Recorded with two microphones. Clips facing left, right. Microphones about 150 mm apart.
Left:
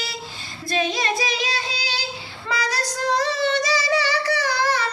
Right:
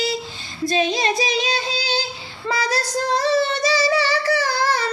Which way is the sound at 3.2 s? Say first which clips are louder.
Right 5 dB; 30° right (ahead or behind).